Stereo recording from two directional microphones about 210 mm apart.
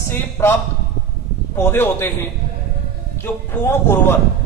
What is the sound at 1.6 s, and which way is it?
Speech, 10° left (ahead or behind).